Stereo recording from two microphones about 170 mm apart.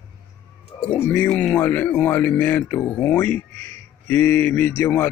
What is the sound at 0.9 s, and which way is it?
Speech, 10° left (ahead or behind).